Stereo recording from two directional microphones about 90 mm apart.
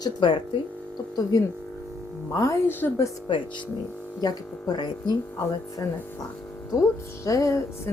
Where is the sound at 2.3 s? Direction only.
35° left (ahead or behind).